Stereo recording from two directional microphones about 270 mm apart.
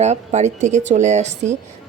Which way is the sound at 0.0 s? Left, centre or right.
Right.